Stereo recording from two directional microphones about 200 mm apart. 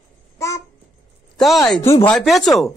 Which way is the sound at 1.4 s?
Centre (ahead or behind).